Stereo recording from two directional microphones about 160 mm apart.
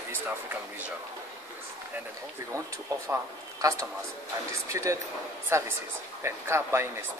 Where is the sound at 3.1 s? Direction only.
20° right (ahead or behind).